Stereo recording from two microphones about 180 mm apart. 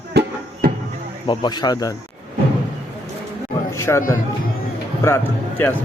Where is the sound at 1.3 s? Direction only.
25° left (ahead or behind).